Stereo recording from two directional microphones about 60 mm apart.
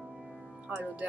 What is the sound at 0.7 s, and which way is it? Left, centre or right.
Speech, right.